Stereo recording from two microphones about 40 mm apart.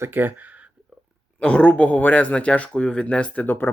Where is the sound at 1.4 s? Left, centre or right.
Left.